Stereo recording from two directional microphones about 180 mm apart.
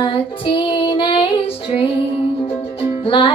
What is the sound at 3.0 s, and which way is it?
Music, 30° left (ahead or behind).